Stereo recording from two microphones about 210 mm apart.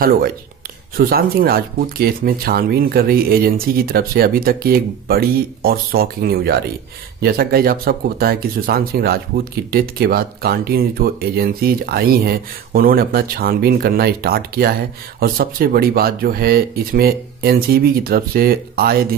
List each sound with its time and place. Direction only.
0.9 s speech: 45° right (ahead or behind)